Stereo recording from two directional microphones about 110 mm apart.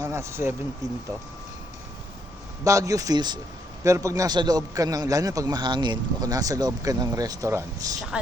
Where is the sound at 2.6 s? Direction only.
30° right (ahead or behind).